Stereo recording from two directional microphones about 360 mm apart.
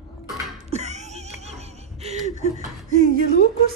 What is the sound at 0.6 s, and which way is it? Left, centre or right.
Music, centre.